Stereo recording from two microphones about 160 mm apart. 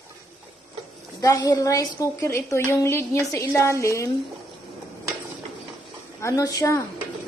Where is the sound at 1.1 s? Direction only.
20° left (ahead or behind).